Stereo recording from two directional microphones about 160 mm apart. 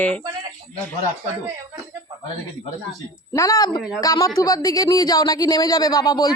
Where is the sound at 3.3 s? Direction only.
20° left (ahead or behind).